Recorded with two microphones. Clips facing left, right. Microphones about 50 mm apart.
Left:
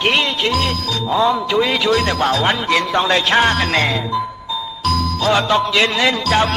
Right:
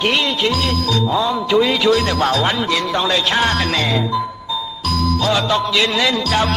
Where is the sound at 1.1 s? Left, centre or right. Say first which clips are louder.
Left 6 dB; left.